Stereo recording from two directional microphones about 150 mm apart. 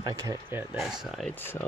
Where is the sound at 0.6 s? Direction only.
5° right (ahead or behind).